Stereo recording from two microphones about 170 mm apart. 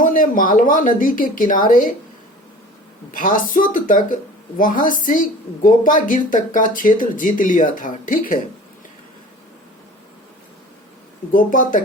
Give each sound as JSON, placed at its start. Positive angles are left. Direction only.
{"t": 0.0, "sound": "speech", "side_deg": 50}
{"t": 3.1, "sound": "speech", "side_deg": 55}
{"t": 11.3, "sound": "speech", "side_deg": 50}